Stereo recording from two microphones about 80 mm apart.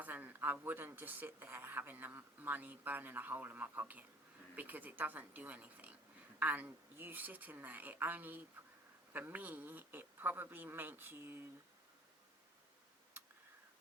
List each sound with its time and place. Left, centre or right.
0.0 s speech: right